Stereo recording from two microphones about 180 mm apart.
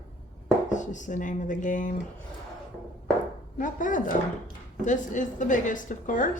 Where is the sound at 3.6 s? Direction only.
45° left (ahead or behind).